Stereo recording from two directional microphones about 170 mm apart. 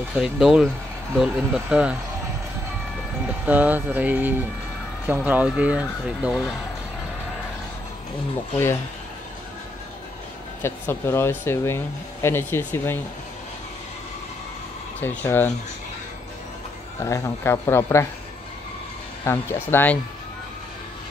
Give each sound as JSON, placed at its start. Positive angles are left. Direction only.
{"t": 0.1, "sound": "speech", "side_deg": -5}
{"t": 3.4, "sound": "speech", "side_deg": -10}
{"t": 10.6, "sound": "speech", "side_deg": 15}
{"t": 15.0, "sound": "speech", "side_deg": 10}
{"t": 17.0, "sound": "speech", "side_deg": 15}
{"t": 19.2, "sound": "speech", "side_deg": 15}